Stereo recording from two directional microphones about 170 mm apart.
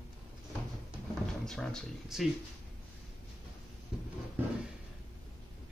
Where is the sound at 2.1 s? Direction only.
Centre (ahead or behind).